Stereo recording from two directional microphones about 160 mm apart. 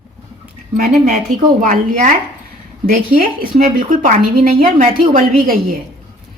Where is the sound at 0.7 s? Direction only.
55° right (ahead or behind).